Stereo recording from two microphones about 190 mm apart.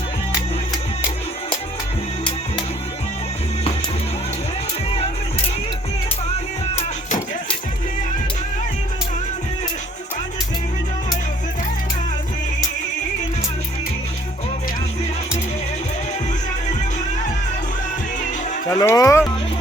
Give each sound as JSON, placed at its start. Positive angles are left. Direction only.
{"t": 18.7, "sound": "speech", "side_deg": 20}